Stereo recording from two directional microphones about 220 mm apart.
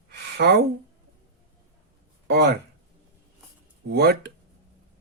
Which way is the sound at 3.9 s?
45° right (ahead or behind).